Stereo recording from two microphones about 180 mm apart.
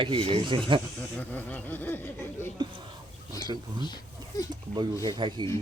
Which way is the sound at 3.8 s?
25° left (ahead or behind).